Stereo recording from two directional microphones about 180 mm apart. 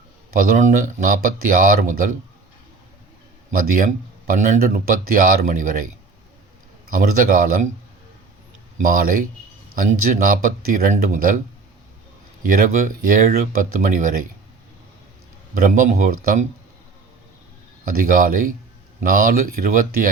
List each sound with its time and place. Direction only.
0.3 s speech: 50° right (ahead or behind)
3.5 s speech: 50° right (ahead or behind)
6.9 s speech: 50° right (ahead or behind)
8.8 s speech: 50° right (ahead or behind)
12.4 s speech: 50° right (ahead or behind)
15.5 s speech: 50° right (ahead or behind)
17.8 s speech: 50° right (ahead or behind)